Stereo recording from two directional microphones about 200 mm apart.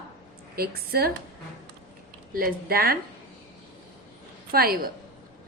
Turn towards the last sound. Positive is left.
turn(degrees=-50)  # may be behind; listen again after turning